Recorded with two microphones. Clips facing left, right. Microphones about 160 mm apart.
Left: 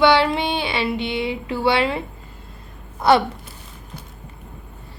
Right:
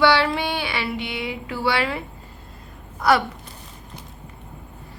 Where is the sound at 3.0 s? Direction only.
25° left (ahead or behind).